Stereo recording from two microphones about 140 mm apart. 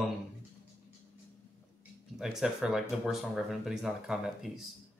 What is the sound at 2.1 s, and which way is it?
A man's voice, 5° right (ahead or behind).